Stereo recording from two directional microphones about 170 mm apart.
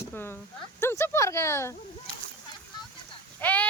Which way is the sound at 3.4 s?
10° left (ahead or behind).